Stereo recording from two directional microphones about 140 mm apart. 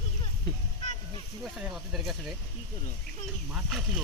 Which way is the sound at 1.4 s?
Centre (ahead or behind).